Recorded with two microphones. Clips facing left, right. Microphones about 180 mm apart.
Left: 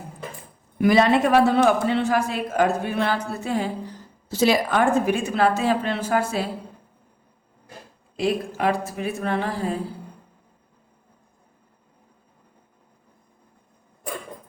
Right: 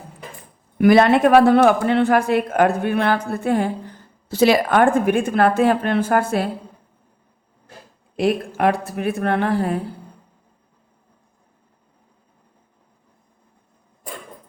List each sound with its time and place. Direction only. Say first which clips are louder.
0.8 s speech: right 4 dB; 60° right (ahead or behind)
8.1 s speech: right 4 dB; 60° right (ahead or behind)